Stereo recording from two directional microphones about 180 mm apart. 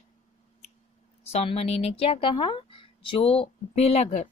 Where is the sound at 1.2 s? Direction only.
35° left (ahead or behind).